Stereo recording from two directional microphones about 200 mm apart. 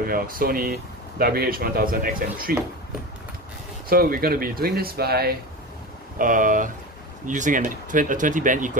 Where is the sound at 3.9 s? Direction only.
45° right (ahead or behind).